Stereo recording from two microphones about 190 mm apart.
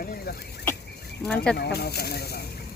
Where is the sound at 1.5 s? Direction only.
60° left (ahead or behind).